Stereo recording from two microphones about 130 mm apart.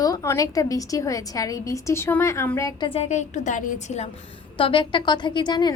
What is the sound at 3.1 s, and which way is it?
A woman's voice, 70° left (ahead or behind).